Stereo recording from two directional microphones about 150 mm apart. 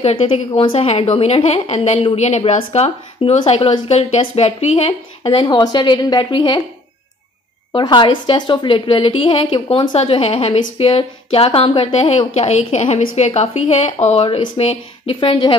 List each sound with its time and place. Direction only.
0.0 s a woman's voice: 40° left (ahead or behind)
7.7 s a woman's voice: 30° left (ahead or behind)